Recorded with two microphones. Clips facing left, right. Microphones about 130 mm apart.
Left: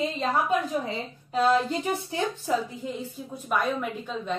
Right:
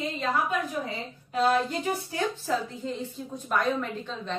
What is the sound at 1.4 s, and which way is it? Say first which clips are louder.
A woman's voice: left 2 dB; 20° left (ahead or behind).